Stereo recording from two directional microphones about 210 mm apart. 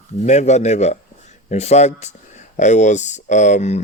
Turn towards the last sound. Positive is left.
turn(degrees=35)  # may be behind; listen again after turning